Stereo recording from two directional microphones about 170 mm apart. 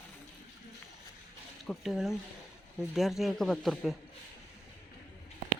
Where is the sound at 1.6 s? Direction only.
Centre (ahead or behind).